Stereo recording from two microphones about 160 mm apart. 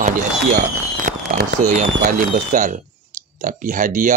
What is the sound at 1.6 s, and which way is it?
Speech, 55° right (ahead or behind).